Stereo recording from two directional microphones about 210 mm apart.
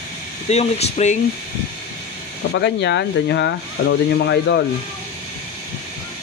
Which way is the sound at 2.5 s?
55° left (ahead or behind).